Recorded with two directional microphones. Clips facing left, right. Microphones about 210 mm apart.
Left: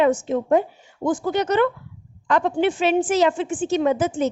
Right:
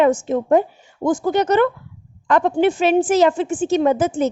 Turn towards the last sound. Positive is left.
turn(degrees=-45)  # may be behind; listen again after turning